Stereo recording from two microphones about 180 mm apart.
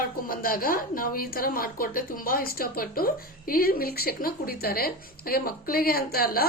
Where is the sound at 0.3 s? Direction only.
55° left (ahead or behind).